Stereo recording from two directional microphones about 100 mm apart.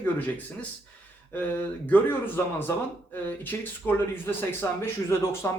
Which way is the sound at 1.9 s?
20° left (ahead or behind).